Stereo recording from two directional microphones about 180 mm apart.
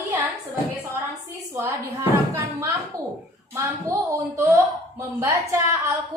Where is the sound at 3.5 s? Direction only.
15° right (ahead or behind).